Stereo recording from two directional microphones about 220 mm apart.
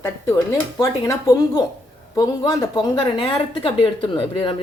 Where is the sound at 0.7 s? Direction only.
15° left (ahead or behind).